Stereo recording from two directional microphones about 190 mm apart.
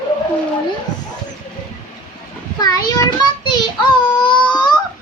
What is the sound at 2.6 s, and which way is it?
Child singing, 20° left (ahead or behind).